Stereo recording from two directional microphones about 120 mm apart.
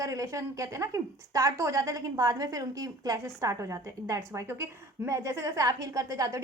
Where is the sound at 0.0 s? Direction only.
30° right (ahead or behind).